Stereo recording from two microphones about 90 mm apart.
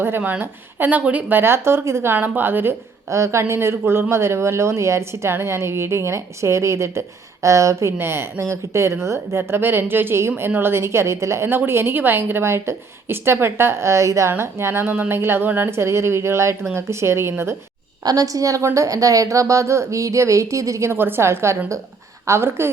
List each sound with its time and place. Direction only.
0.2 s a woman's voice: 20° right (ahead or behind)
3.1 s a woman's voice: 35° right (ahead or behind)
18.0 s a woman's voice: 45° right (ahead or behind); by 22.7 s 30° right (ahead or behind)